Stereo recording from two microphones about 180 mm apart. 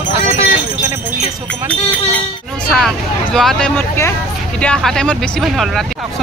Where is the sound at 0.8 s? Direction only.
15° right (ahead or behind).